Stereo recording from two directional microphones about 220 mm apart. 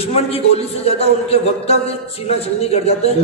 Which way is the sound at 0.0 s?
25° left (ahead or behind).